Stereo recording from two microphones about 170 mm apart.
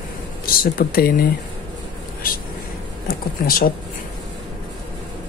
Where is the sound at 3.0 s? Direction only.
60° left (ahead or behind).